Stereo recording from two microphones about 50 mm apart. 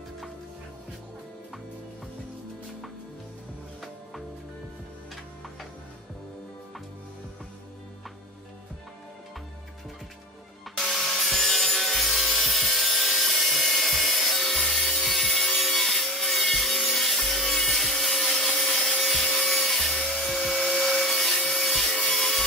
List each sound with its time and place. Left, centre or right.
10.8 s wood: centre